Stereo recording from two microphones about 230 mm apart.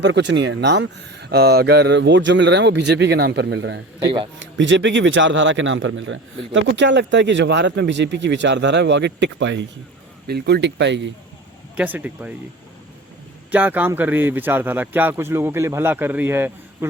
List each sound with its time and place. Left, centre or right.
0.0 s a man's voice: right
11.8 s a man's voice: centre
13.5 s a man's voice: centre